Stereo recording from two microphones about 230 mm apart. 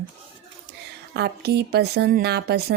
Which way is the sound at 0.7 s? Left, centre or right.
Right.